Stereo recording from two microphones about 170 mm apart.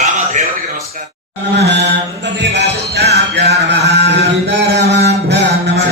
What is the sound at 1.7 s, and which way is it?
Mantra, 90° right.